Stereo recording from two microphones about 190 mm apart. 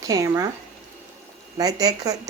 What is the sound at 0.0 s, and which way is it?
Speech, 15° right (ahead or behind).